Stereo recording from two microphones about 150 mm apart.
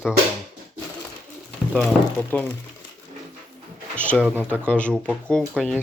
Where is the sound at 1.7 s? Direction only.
10° left (ahead or behind).